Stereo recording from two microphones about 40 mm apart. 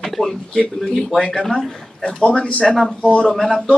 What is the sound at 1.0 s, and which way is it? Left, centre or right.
Speech, left.